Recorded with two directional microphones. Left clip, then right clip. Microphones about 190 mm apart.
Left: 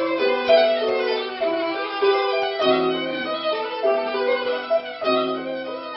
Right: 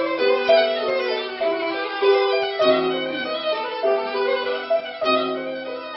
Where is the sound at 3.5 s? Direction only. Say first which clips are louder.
Even; centre (ahead or behind).